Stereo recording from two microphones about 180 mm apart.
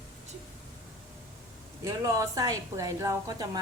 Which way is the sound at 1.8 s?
15° right (ahead or behind).